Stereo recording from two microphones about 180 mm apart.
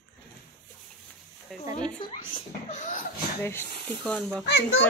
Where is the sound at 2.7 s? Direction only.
45° left (ahead or behind).